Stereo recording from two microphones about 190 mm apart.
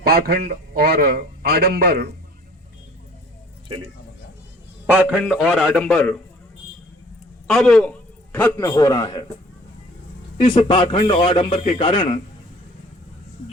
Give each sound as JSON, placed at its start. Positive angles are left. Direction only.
{"t": 0.0, "sound": "a man's voice", "side_deg": -55}
{"t": 4.9, "sound": "a man's voice", "side_deg": -10}
{"t": 7.4, "sound": "a man's voice", "side_deg": 0}
{"t": 10.4, "sound": "a man's voice", "side_deg": 25}